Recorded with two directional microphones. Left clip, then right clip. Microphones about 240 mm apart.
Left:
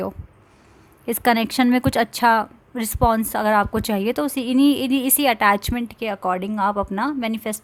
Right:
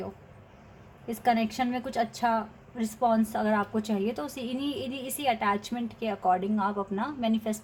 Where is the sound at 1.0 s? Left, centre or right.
Left.